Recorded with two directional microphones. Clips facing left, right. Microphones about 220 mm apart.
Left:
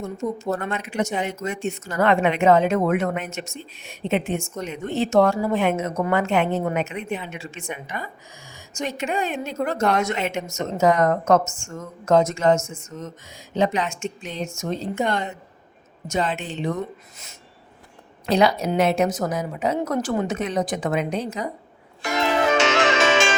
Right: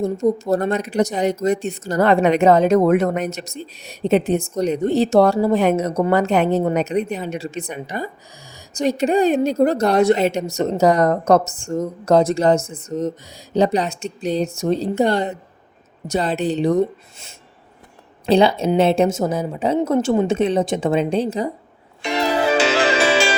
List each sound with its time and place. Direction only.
0.0 s a woman's voice: 35° right (ahead or behind)
22.0 s music: 35° right (ahead or behind)